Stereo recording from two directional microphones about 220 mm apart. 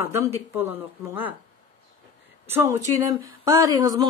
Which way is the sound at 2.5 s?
10° right (ahead or behind).